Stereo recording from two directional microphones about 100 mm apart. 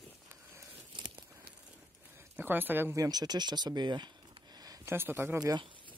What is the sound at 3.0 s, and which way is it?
Speech, 40° right (ahead or behind).